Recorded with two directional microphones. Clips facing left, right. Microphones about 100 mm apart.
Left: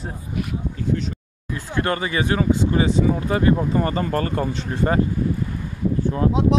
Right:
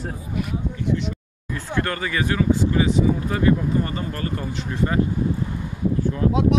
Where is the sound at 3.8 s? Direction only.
45° left (ahead or behind).